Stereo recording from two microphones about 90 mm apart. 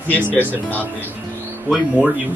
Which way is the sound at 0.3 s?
20° left (ahead or behind).